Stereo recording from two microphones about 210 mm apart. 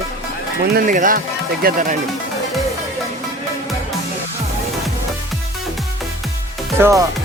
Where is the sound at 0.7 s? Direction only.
40° right (ahead or behind).